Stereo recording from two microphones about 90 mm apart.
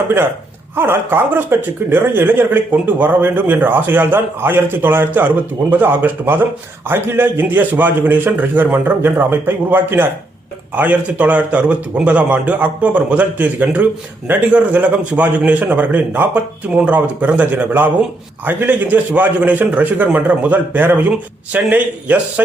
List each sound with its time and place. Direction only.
0.8 s a man's voice: 25° right (ahead or behind)